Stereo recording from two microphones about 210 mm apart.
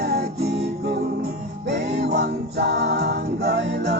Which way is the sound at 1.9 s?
50° right (ahead or behind).